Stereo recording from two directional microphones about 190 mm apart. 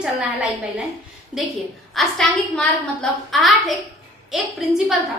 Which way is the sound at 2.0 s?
Centre (ahead or behind).